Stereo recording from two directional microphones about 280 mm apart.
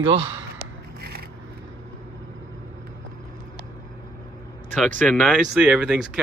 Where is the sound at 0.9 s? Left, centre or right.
Right.